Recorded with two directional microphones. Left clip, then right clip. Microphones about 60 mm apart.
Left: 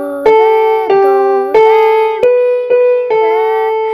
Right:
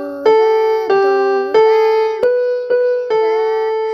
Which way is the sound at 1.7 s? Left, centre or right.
Centre.